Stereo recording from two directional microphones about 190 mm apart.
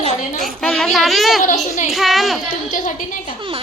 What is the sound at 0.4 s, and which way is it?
Speech, 5° left (ahead or behind).